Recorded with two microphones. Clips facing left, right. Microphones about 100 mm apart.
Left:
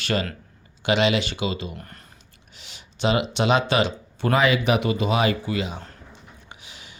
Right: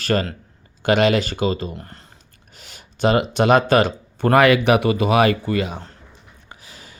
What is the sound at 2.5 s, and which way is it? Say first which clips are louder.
Speech: right 3 dB; 45° right (ahead or behind).